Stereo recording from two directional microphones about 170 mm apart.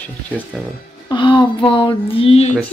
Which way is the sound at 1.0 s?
30° left (ahead or behind).